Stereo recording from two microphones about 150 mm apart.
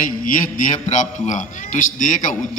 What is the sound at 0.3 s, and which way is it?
A man's voice, 65° left (ahead or behind).